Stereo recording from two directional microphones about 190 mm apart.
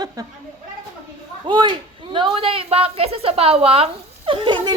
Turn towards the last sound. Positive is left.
turn(degrees=-25)  # may be behind; listen again after turning